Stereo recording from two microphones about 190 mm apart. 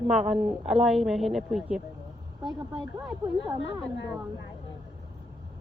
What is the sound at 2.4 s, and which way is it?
Speech, 25° right (ahead or behind).